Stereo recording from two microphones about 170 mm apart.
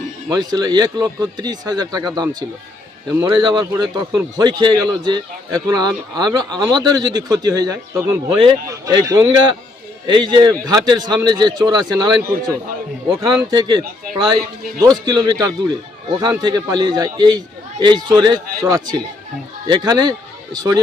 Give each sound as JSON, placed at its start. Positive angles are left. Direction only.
{"t": 0.3, "sound": "a man's voice", "side_deg": -25}
{"t": 8.3, "sound": "speech", "side_deg": -30}
{"t": 8.6, "sound": "a man's voice", "side_deg": -20}
{"t": 13.1, "sound": "a man's voice", "side_deg": -25}